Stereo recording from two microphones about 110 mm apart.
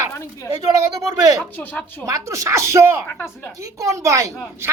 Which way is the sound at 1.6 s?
15° left (ahead or behind).